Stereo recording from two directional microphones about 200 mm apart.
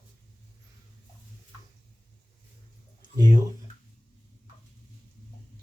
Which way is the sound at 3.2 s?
20° right (ahead or behind).